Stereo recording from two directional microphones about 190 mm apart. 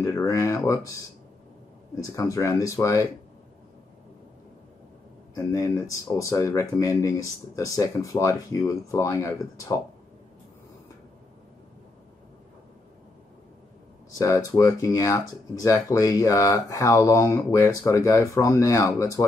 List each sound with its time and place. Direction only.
0.0 s speech: 15° left (ahead or behind)
5.3 s speech: 15° left (ahead or behind)
14.1 s speech: 15° left (ahead or behind)